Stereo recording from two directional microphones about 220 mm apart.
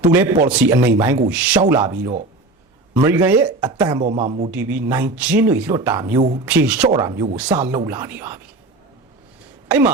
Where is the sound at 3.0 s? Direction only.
10° right (ahead or behind).